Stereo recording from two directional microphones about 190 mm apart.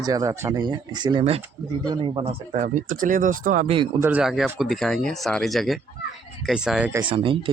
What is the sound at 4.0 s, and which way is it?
Speech, 10° right (ahead or behind).